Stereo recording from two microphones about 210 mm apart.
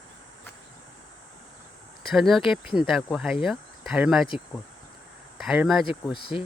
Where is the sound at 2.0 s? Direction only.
Centre (ahead or behind).